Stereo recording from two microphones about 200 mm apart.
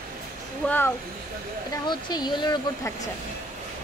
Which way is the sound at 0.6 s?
10° left (ahead or behind).